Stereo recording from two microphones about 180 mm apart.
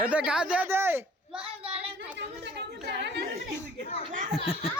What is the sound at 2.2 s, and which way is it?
Chatter, 70° right (ahead or behind).